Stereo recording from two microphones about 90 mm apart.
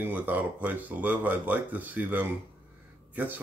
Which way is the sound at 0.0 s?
20° right (ahead or behind).